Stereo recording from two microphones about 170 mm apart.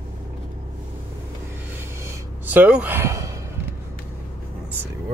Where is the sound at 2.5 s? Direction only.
10° right (ahead or behind).